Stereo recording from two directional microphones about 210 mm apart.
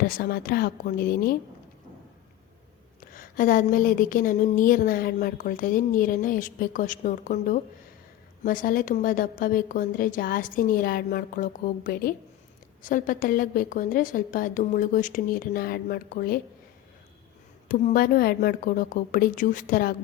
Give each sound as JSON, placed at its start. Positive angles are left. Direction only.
{"t": 0.0, "sound": "a woman's voice", "side_deg": 45}
{"t": 3.0, "sound": "speech", "side_deg": 40}
{"t": 17.7, "sound": "speech", "side_deg": 40}